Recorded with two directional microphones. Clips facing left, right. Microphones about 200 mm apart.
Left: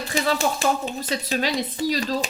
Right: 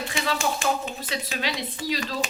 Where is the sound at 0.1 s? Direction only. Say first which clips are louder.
Left 6 dB; 35° left (ahead or behind).